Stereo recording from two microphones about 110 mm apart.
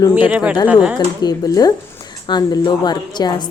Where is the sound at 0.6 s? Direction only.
10° right (ahead or behind).